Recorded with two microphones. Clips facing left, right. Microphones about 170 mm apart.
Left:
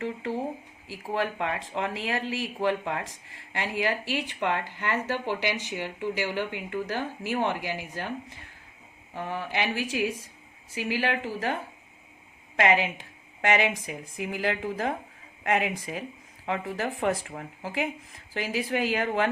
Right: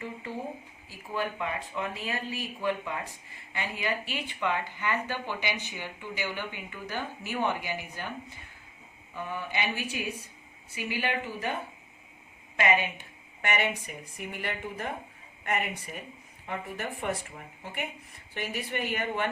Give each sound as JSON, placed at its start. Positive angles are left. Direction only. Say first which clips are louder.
{"t": 0.0, "sound": "speech", "louder": "left 6 dB", "side_deg": 80}
{"t": 9.1, "sound": "speech", "louder": "left 3 dB", "side_deg": 85}
{"t": 12.5, "sound": "speech", "louder": "left 3 dB", "side_deg": 90}